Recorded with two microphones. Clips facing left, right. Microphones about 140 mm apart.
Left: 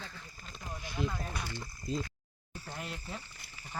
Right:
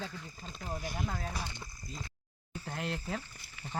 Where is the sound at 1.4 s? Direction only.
15° right (ahead or behind).